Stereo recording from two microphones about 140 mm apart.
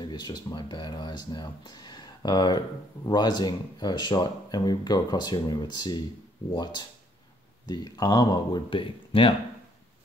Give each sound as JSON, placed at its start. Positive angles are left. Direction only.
{"t": 0.0, "sound": "speech", "side_deg": 30}